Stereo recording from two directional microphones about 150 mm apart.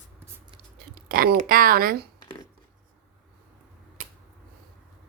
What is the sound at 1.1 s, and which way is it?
Speech, 75° right (ahead or behind).